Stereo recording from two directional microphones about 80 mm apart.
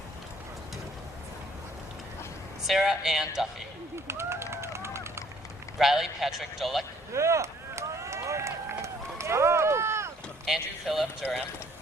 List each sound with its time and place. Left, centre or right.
2.6 s a man's voice: centre
4.0 s a sound: right
5.7 s a man's voice: centre
7.1 s run: right
10.4 s a man's voice: centre